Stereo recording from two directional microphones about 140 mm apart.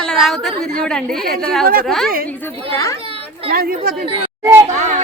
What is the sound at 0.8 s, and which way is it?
Speech, 5° left (ahead or behind).